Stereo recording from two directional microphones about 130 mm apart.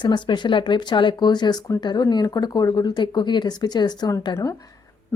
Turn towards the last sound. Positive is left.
turn(degrees=30)  # may be behind; listen again after turning